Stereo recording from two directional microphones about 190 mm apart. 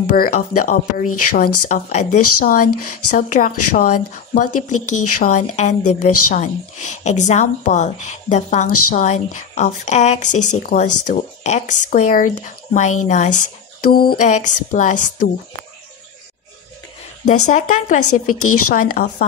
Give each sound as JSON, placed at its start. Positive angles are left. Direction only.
{"t": 0.1, "sound": "a woman's voice", "side_deg": 50}
{"t": 17.3, "sound": "speech", "side_deg": 40}